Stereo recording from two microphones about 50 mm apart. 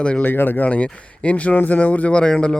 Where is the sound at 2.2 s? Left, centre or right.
Centre.